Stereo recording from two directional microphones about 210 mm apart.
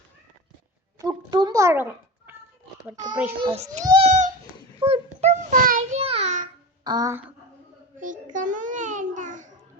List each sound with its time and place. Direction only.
0.9 s a sound: 20° right (ahead or behind)
2.9 s a child's voice: 15° right (ahead or behind)
4.0 s babbling: 35° right (ahead or behind)
4.8 s a sound: 25° right (ahead or behind)
5.2 s child singing: 40° right (ahead or behind)
6.0 s child singing: 30° right (ahead or behind)
6.8 s speech: 20° right (ahead or behind)
7.9 s babbling: 40° right (ahead or behind)